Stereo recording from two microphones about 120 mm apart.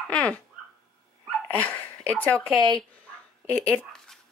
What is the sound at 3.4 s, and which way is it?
Dog, 10° left (ahead or behind).